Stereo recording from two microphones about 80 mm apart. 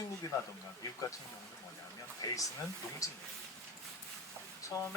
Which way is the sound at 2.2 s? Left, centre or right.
Left.